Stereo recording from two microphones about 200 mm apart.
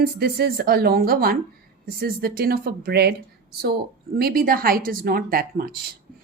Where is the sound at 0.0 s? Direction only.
50° right (ahead or behind).